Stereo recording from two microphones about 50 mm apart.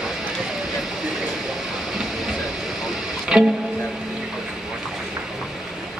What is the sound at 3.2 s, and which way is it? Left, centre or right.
Music, centre.